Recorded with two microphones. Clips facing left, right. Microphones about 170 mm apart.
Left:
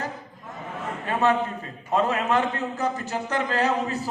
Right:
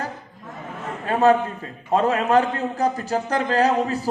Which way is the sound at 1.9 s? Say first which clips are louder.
Right 4 dB; 40° right (ahead or behind).